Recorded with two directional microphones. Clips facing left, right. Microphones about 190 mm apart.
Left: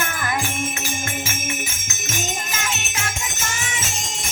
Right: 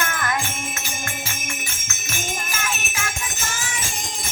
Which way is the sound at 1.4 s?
20° left (ahead or behind).